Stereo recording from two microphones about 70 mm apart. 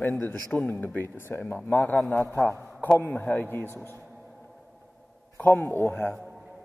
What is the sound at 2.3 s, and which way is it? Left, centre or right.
A man's voice, left.